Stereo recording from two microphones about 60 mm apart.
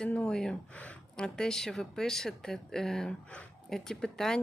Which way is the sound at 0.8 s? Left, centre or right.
Left.